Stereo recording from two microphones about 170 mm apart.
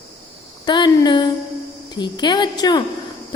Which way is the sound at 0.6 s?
25° left (ahead or behind).